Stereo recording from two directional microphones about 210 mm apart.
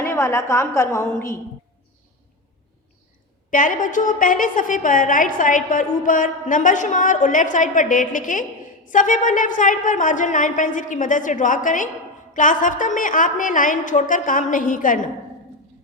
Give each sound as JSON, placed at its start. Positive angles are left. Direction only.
{"t": 0.0, "sound": "a woman's voice", "side_deg": 10}
{"t": 3.5, "sound": "a woman's voice", "side_deg": 40}